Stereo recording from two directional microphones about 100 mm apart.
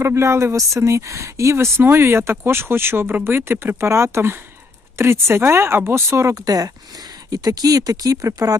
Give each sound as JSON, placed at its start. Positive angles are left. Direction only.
{"t": 0.0, "sound": "speech", "side_deg": -25}
{"t": 6.4, "sound": "speech", "side_deg": -40}